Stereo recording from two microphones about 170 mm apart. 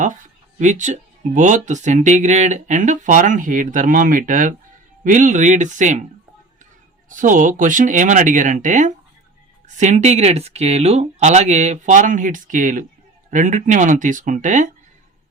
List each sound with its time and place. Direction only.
0.0 s a sound: 50° right (ahead or behind)
1.4 s speech: 50° right (ahead or behind)
7.1 s speech: 50° right (ahead or behind)